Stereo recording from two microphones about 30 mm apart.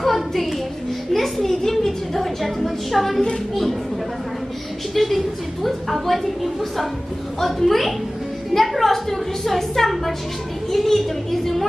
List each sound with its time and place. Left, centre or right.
0.0 s a sound: centre
1.8 s a woman's voice: centre
4.9 s a woman's voice: centre